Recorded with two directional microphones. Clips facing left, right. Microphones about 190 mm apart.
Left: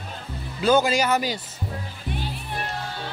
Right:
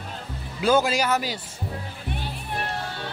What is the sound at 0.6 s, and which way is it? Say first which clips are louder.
Speech: left 1 dB; 5° right (ahead or behind).